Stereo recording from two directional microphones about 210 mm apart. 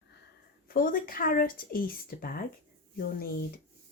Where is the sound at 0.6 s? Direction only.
45° left (ahead or behind).